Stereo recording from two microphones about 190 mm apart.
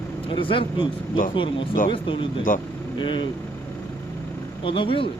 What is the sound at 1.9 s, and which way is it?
Speech, 25° left (ahead or behind).